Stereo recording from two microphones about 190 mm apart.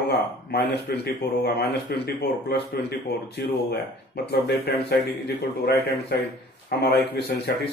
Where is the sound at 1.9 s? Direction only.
55° left (ahead or behind).